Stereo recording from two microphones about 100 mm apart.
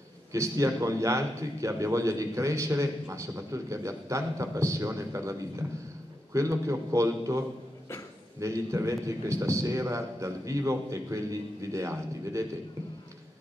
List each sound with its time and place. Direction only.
0.3 s a man's voice: 30° right (ahead or behind)